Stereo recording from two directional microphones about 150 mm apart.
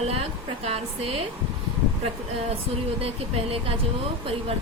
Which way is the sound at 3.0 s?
40° right (ahead or behind).